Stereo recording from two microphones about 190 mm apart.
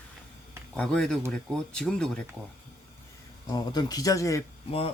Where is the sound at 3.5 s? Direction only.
20° left (ahead or behind).